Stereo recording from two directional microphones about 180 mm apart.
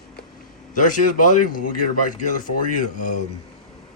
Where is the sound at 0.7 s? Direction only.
45° left (ahead or behind).